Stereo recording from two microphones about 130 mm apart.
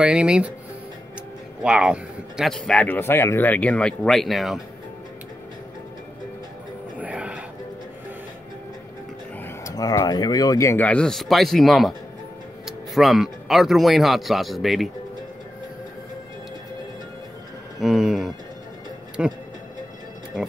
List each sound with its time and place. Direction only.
0.0 s speech: 5° right (ahead or behind)
1.6 s speech: 5° right (ahead or behind)
7.0 s a sound: 10° right (ahead or behind)
9.4 s speech: 25° left (ahead or behind)
10.8 s speech: 10° left (ahead or behind)
17.7 s a sound: 5° right (ahead or behind)
19.2 s speech: 10° right (ahead or behind)